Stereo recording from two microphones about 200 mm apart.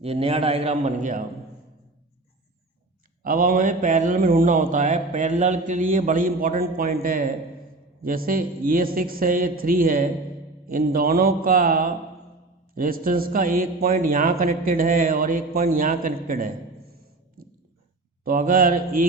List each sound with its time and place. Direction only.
0.0 s a man's voice: 30° right (ahead or behind)
3.2 s a man's voice: 45° right (ahead or behind)
17.4 s a sound: 45° right (ahead or behind)
18.3 s a man's voice: 45° right (ahead or behind)